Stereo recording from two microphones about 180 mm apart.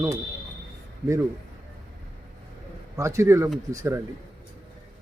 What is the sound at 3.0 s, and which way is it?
Speech, 15° right (ahead or behind).